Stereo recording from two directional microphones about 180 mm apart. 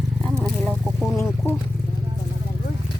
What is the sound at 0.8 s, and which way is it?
Speech, centre (ahead or behind).